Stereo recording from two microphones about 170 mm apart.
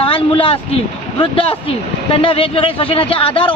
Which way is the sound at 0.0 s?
30° left (ahead or behind).